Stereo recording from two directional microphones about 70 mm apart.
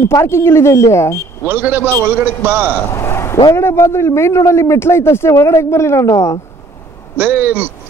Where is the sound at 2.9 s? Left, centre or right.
Left.